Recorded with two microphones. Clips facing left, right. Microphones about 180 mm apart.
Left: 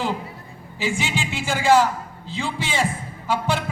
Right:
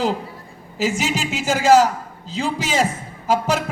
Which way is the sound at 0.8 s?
40° right (ahead or behind).